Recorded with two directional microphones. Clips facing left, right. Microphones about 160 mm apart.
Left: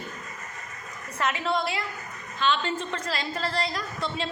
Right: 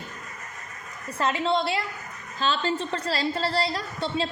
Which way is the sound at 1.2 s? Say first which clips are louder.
Right 3 dB; 30° right (ahead or behind).